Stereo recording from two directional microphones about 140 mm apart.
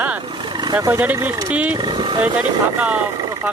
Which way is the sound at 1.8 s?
30° right (ahead or behind).